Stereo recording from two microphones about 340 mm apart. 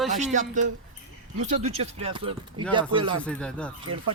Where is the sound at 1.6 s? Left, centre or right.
Centre.